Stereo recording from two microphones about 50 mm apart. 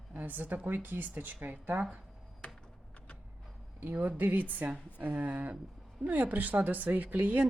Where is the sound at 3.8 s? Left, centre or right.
Right.